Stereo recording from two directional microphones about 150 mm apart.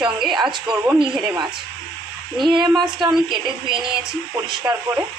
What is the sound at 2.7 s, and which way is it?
A woman's voice, 5° right (ahead or behind).